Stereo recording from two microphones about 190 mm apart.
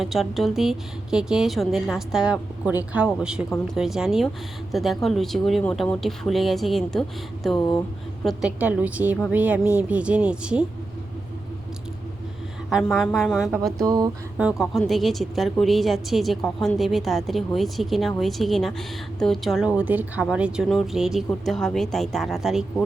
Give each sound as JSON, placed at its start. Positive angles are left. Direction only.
{"t": 0.0, "sound": "a woman's voice", "side_deg": 0}
{"t": 12.7, "sound": "a woman's voice", "side_deg": 0}
{"t": 13.8, "sound": "a sound", "side_deg": -20}
{"t": 14.3, "sound": "a woman's voice", "side_deg": -5}